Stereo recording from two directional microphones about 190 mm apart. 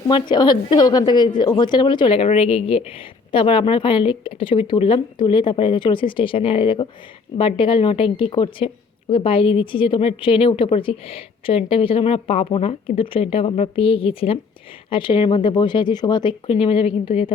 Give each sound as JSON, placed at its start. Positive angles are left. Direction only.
{"t": 0.1, "sound": "a woman's voice", "side_deg": 25}